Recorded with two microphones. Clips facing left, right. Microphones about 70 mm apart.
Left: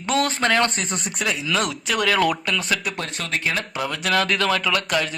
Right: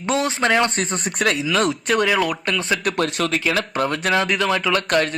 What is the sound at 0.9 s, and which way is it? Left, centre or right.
Speech, right.